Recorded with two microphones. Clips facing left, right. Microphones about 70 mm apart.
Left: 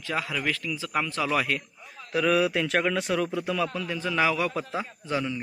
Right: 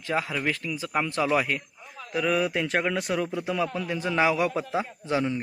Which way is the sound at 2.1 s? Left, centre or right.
Centre.